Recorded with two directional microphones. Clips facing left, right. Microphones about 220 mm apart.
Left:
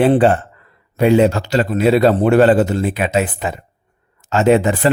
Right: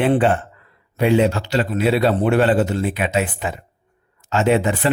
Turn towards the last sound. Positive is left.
turn(degrees=40)  # may be behind; listen again after turning